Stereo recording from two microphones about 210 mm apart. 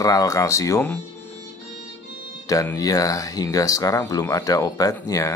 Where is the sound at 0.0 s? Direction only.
15° left (ahead or behind).